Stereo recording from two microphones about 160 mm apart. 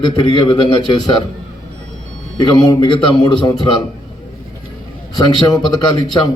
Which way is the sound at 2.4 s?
25° left (ahead or behind).